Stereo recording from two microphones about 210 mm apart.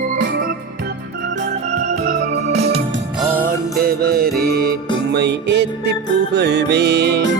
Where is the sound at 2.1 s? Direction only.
30° right (ahead or behind).